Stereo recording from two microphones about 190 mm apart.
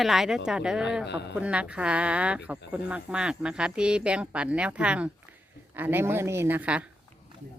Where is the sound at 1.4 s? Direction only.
5° right (ahead or behind).